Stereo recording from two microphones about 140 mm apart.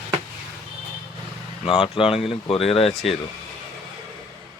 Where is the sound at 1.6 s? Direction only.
40° left (ahead or behind).